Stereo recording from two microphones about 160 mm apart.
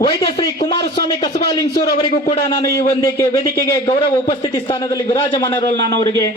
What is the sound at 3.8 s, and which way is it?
A man's voice, 35° left (ahead or behind).